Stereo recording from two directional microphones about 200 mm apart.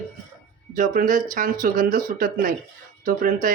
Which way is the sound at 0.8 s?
40° right (ahead or behind).